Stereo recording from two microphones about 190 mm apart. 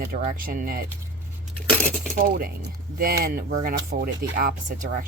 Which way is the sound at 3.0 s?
50° right (ahead or behind).